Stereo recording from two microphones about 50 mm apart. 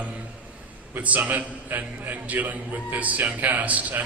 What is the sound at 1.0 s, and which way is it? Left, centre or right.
A man's voice, right.